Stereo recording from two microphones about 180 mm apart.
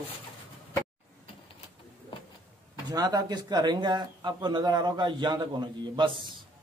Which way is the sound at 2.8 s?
20° right (ahead or behind).